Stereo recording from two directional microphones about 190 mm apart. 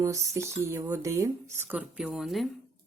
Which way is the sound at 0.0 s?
15° right (ahead or behind).